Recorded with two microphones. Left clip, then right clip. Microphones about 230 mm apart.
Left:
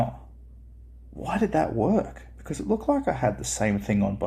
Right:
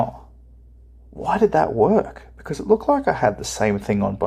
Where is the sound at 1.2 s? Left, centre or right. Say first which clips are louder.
Right 7 dB; right.